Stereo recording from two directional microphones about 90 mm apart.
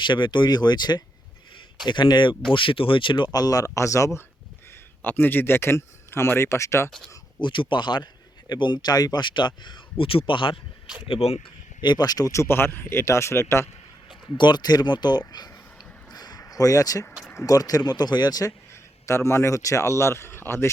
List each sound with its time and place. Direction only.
0.0 s speech: 60° left (ahead or behind)
2.5 s speech: 70° left (ahead or behind); by 4.2 s 35° left (ahead or behind)
5.0 s speech: 20° left (ahead or behind)
7.4 s speech: 65° left (ahead or behind)
11.8 s speech: 55° left (ahead or behind); by 13.7 s 30° left (ahead or behind)
14.3 s speech: 55° left (ahead or behind)
16.1 s a sound: 50° left (ahead or behind)
16.4 s speech: 40° left (ahead or behind)
18.7 s speech: 35° left (ahead or behind)